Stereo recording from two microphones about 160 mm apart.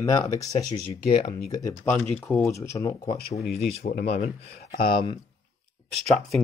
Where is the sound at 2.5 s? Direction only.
20° left (ahead or behind).